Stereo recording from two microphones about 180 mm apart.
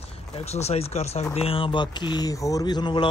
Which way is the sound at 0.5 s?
35° left (ahead or behind).